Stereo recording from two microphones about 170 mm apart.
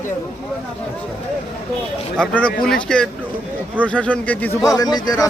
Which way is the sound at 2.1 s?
5° left (ahead or behind).